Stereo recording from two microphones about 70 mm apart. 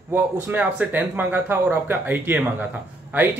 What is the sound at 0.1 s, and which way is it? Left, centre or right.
Speech, right.